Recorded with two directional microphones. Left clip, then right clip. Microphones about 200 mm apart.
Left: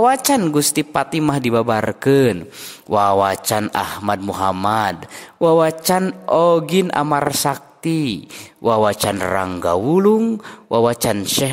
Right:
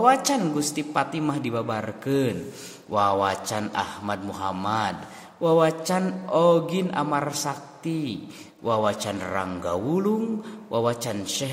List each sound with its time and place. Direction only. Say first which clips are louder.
0.0 s mantra: left 5 dB; 50° left (ahead or behind)